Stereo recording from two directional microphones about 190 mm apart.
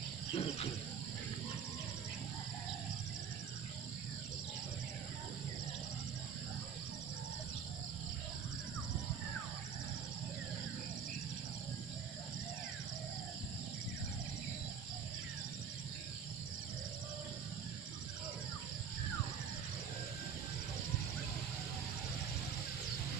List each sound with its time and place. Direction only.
0.3 s cricket: 30° left (ahead or behind)